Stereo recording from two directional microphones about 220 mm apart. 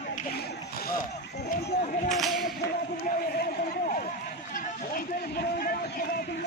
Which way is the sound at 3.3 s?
35° left (ahead or behind).